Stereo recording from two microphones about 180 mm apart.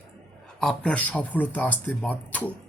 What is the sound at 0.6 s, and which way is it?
Speech, 5° left (ahead or behind).